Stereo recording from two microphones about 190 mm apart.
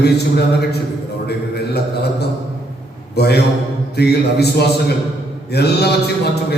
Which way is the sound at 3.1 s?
60° left (ahead or behind).